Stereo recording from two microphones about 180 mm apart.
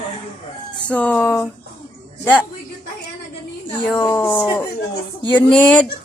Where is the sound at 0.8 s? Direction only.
10° left (ahead or behind).